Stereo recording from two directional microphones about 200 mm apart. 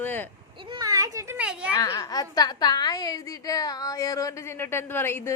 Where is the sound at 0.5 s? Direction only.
25° right (ahead or behind).